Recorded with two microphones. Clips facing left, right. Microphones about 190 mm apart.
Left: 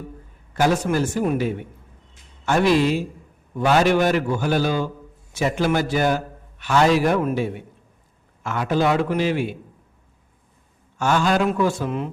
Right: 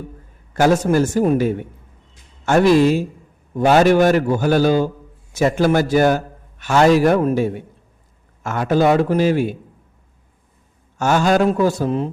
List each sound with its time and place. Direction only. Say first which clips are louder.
0.5 s a man's voice: right 5 dB; 45° right (ahead or behind)
10.9 s speech: right 4 dB; 45° right (ahead or behind)